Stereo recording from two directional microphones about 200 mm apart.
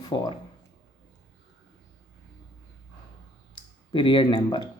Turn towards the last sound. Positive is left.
turn(degrees=25)  # may be behind; listen again after turning